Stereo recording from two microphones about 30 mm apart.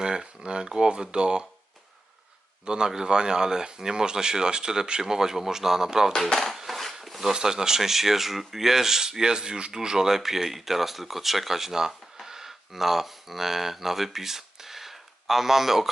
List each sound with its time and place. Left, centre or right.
0.0 s speech: right
2.6 s speech: right
6.2 s speech: centre
6.7 s filing: centre
7.0 s a sound: centre
7.3 s speech: right
9.7 s speech: centre